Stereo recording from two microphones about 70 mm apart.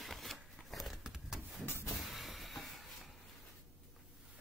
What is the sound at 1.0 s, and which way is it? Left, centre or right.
Roaring cats, centre.